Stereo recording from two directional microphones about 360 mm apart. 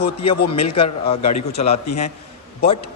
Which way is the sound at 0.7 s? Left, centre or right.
Centre.